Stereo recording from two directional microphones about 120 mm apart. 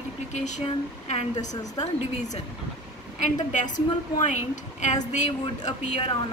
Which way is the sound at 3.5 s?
90° left.